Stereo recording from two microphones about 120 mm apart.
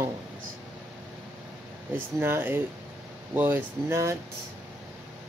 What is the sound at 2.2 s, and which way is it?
Speech, 20° right (ahead or behind).